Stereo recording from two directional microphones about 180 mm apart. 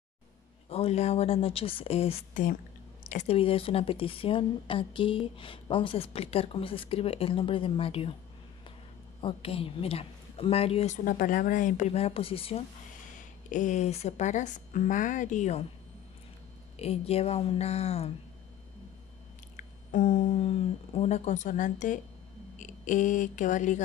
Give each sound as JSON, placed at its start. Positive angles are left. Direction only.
{"t": 0.7, "sound": "speech", "side_deg": 35}
{"t": 9.2, "sound": "speech", "side_deg": 30}
{"t": 11.1, "sound": "speech", "side_deg": 50}
{"t": 13.5, "sound": "speech", "side_deg": 45}
{"t": 16.7, "sound": "speech", "side_deg": 35}
{"t": 19.5, "sound": "speech", "side_deg": 45}
{"t": 22.6, "sound": "a sound", "side_deg": 45}